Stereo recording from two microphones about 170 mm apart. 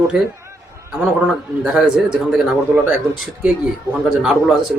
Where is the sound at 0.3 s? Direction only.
15° right (ahead or behind).